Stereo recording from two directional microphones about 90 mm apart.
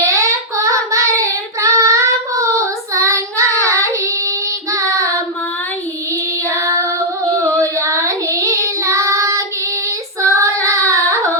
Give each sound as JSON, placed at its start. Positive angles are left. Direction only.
{"t": 0.0, "sound": "child singing", "side_deg": -35}
{"t": 6.5, "sound": "child singing", "side_deg": -35}